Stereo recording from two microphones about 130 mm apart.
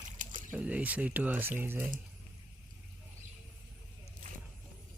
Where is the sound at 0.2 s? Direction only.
90° right.